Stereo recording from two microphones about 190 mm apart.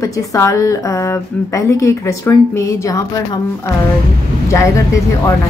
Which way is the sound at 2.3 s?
10° left (ahead or behind).